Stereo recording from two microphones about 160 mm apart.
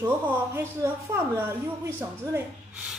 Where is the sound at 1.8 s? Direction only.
15° right (ahead or behind).